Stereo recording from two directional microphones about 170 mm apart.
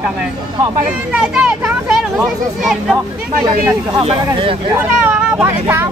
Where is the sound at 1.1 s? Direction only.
5° right (ahead or behind).